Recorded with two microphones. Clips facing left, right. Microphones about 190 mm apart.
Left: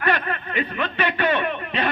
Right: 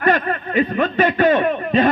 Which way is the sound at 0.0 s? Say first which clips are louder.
Right 6 dB; 40° right (ahead or behind).